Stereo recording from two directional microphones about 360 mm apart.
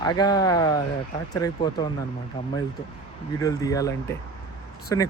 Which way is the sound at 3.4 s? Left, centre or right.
Centre.